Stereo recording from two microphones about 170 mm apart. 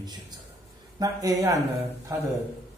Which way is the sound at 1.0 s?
20° right (ahead or behind).